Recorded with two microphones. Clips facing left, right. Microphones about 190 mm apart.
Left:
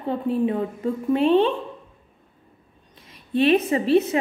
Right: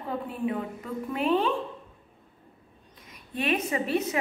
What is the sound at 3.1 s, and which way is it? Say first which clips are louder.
Speech: left 10 dB; 30° left (ahead or behind).